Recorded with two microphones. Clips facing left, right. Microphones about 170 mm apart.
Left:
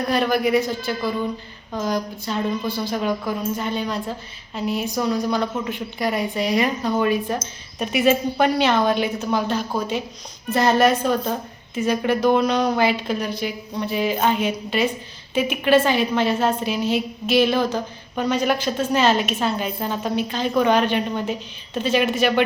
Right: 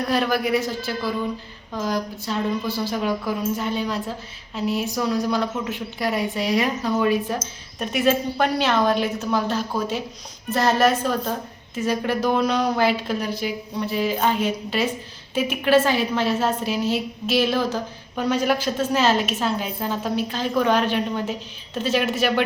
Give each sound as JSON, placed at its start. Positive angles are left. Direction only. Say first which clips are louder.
{"t": 0.1, "sound": "a woman's voice", "louder": "left 3 dB", "side_deg": 0}